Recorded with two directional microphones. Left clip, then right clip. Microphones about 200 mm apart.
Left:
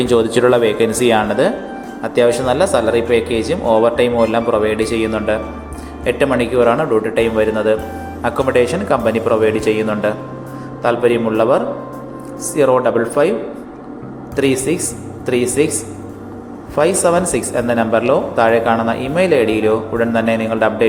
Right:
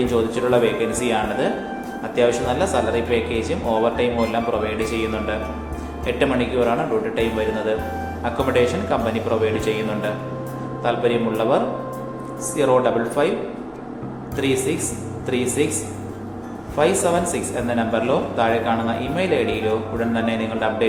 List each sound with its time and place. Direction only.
0.1 s speech: 35° left (ahead or behind)
14.3 s speech: 25° left (ahead or behind)
16.7 s speech: 30° left (ahead or behind)